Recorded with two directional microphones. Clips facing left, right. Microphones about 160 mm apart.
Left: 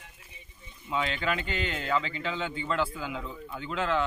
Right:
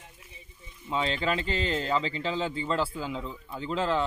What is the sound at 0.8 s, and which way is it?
Speech, 30° right (ahead or behind).